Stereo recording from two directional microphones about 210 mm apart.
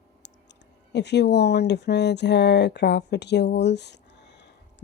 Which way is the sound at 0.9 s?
55° left (ahead or behind).